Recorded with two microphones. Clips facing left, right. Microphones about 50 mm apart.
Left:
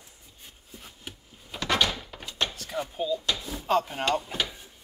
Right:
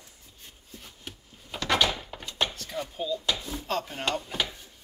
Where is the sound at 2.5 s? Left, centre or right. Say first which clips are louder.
Left 2 dB; centre.